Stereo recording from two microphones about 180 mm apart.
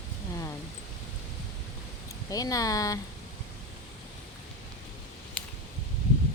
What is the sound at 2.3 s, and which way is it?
Speech, 20° left (ahead or behind).